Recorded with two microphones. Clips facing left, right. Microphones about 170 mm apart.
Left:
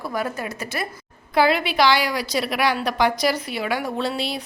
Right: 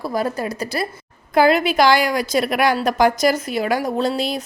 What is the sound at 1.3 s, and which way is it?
A woman's voice, 45° right (ahead or behind).